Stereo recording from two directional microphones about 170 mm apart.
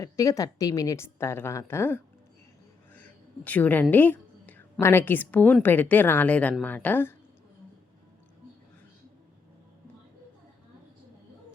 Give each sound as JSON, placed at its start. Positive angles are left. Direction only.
{"t": 0.0, "sound": "a woman's voice", "side_deg": 20}
{"t": 2.9, "sound": "a sound", "side_deg": 10}
{"t": 3.9, "sound": "a woman's voice", "side_deg": 10}